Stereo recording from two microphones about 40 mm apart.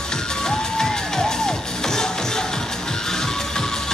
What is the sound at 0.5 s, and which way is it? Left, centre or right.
Music, centre.